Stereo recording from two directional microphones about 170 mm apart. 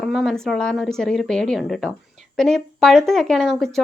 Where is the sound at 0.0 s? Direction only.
Centre (ahead or behind).